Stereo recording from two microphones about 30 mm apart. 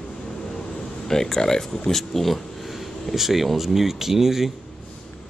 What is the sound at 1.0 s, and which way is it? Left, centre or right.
Speech, centre.